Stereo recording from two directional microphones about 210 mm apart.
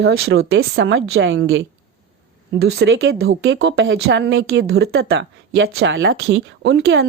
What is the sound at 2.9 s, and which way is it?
A woman's voice, 65° right (ahead or behind).